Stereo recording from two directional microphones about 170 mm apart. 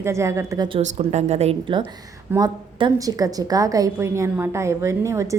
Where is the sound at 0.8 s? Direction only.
40° right (ahead or behind); by 5.2 s 15° right (ahead or behind).